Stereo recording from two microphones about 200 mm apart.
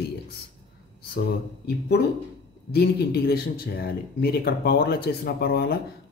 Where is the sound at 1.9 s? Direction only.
55° left (ahead or behind).